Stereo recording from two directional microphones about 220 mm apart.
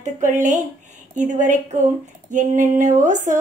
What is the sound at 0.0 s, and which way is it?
A woman's voice, 35° right (ahead or behind).